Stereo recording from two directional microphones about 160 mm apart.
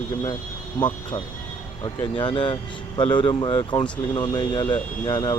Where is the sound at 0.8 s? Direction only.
30° left (ahead or behind).